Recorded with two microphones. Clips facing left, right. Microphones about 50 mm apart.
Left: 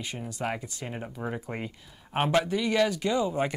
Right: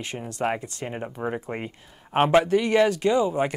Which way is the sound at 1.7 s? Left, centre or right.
Right.